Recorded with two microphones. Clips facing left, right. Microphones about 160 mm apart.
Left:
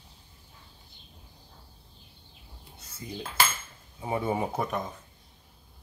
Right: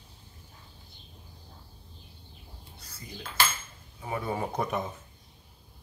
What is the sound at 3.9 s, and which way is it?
Speech, 25° left (ahead or behind).